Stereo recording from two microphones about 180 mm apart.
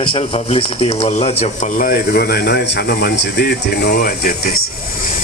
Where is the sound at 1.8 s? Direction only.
55° left (ahead or behind).